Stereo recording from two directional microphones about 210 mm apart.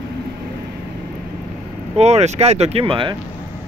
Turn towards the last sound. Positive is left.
turn(degrees=-25)  # may be behind; listen again after turning